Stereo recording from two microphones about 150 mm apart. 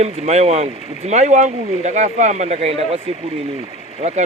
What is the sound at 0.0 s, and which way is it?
Speech, 45° right (ahead or behind).